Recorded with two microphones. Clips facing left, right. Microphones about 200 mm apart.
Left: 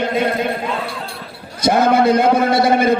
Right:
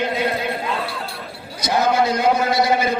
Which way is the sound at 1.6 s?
55° left (ahead or behind).